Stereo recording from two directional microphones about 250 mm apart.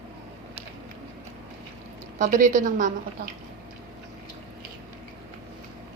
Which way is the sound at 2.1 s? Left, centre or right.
Right.